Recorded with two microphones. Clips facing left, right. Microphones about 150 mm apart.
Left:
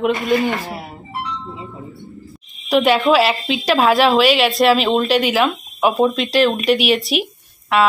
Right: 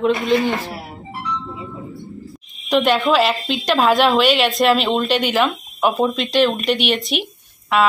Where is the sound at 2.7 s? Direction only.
5° left (ahead or behind).